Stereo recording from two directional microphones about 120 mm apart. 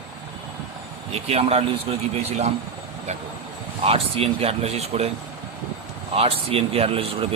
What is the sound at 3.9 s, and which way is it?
Speech, 55° right (ahead or behind).